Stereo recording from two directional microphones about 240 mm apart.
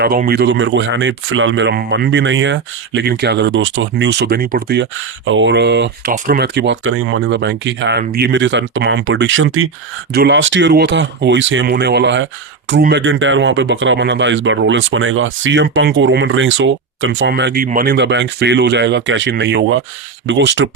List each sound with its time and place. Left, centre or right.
0.0 s speech: right
10.1 s speech: right